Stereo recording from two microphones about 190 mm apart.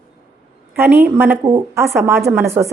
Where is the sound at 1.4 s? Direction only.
20° right (ahead or behind).